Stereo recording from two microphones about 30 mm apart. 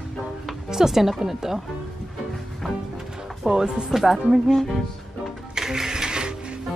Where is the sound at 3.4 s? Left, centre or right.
Right.